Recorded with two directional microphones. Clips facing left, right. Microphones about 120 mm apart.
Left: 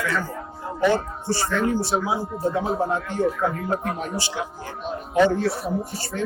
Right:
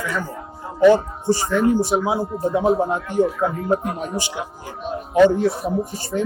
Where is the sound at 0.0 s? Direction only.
15° right (ahead or behind).